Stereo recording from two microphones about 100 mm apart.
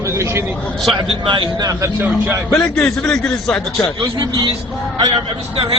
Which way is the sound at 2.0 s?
25° right (ahead or behind).